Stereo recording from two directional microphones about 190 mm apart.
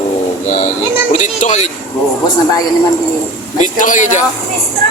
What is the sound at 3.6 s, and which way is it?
Speech, 45° left (ahead or behind).